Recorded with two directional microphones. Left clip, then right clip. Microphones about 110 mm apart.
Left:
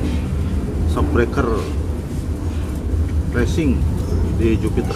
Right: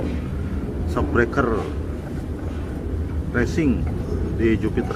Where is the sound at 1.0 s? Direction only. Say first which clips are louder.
Left 1 dB; 15° right (ahead or behind).